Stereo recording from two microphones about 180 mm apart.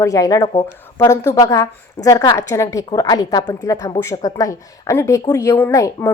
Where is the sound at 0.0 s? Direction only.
20° left (ahead or behind).